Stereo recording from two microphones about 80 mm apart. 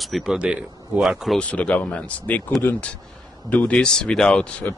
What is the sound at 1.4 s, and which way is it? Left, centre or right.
Speech, centre.